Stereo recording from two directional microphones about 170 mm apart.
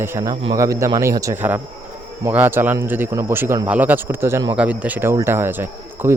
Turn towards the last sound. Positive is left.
turn(degrees=-10)  # may be behind; listen again after turning